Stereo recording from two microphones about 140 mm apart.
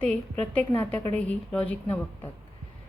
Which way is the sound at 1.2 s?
10° left (ahead or behind).